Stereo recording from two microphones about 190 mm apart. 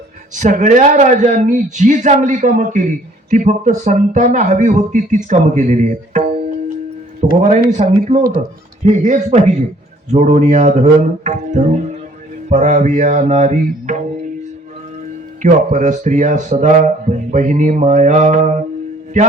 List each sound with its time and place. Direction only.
0.3 s a man's voice: 40° right (ahead or behind)
15.4 s a man's voice: 40° right (ahead or behind)